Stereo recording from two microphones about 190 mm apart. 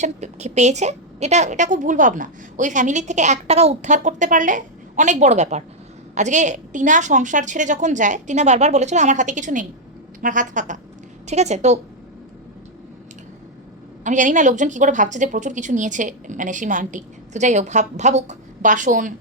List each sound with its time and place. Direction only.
0.0 s a woman's voice: 35° right (ahead or behind)
14.0 s a woman's voice: 40° right (ahead or behind)